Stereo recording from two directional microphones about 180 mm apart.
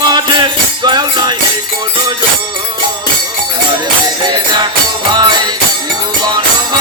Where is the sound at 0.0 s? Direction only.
25° right (ahead or behind).